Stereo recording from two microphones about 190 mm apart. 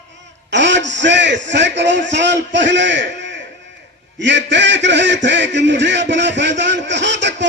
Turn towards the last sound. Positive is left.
turn(degrees=-70)  # may be behind; listen again after turning